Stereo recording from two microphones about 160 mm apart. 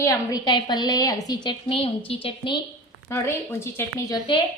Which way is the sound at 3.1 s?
15° left (ahead or behind).